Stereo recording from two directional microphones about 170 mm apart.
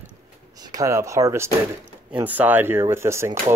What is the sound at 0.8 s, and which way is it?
Speech, 15° right (ahead or behind).